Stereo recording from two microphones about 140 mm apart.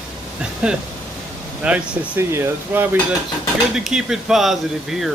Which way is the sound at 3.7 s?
5° right (ahead or behind).